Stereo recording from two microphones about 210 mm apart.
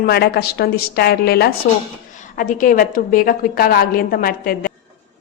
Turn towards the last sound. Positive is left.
turn(degrees=45)  # may be behind; listen again after turning